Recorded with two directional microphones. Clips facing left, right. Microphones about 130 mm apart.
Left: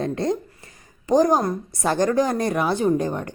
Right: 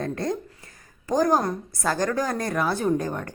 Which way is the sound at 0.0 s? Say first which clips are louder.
Left 4 dB; 20° left (ahead or behind).